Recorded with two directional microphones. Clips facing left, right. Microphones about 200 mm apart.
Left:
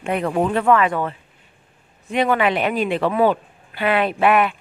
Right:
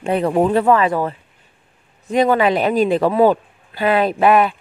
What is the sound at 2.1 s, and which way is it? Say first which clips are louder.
Speech: right 4 dB; 40° right (ahead or behind).